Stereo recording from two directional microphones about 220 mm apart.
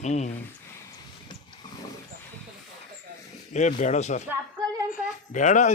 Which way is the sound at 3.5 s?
35° left (ahead or behind).